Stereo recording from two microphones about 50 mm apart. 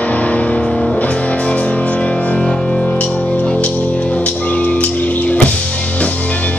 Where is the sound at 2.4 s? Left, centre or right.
Centre.